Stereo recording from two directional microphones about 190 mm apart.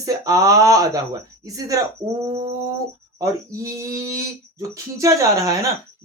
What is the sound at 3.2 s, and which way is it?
Speech, 15° right (ahead or behind).